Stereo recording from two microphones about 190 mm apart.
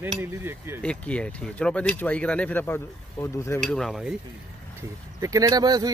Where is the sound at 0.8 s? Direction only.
5° left (ahead or behind).